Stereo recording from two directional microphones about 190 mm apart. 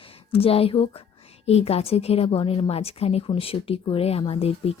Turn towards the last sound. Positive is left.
turn(degrees=30)  # may be behind; listen again after turning